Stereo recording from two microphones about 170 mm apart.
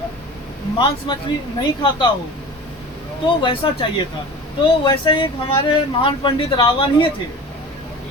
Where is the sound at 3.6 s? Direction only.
30° left (ahead or behind).